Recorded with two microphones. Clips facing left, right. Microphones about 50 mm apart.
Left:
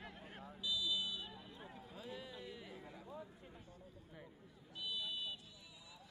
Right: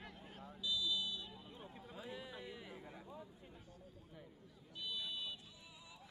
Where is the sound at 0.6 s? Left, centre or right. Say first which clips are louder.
Even; left.